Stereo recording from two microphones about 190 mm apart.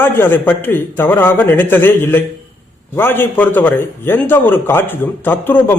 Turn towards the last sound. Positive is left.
turn(degrees=10)  # may be behind; listen again after turning